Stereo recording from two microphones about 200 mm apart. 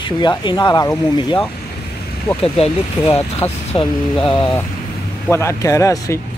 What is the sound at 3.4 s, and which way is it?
Speech, 10° left (ahead or behind).